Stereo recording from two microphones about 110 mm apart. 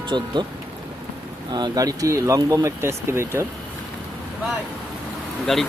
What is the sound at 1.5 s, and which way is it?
Speech, 35° right (ahead or behind).